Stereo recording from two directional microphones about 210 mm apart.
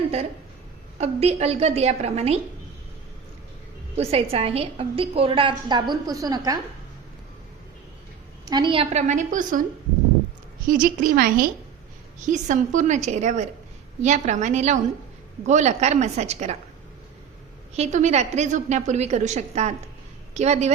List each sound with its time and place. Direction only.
0.9 s a woman's voice: 30° right (ahead or behind)
3.9 s a woman's voice: 30° right (ahead or behind)
8.4 s a woman's voice: 20° right (ahead or behind); by 9.6 s 40° right (ahead or behind)
10.7 s a woman's voice: 40° right (ahead or behind)
17.7 s a woman's voice: 35° right (ahead or behind)